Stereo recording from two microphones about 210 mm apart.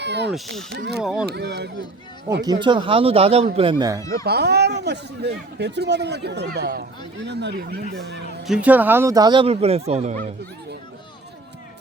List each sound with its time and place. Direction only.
0.0 s speech: 55° right (ahead or behind)
1.0 s speech: 5° right (ahead or behind)
1.3 s speech: 50° right (ahead or behind)
2.4 s speech: 20° right (ahead or behind)
4.1 s speech: 50° right (ahead or behind)
8.4 s speech: 5° right (ahead or behind); by 10.2 s 35° right (ahead or behind)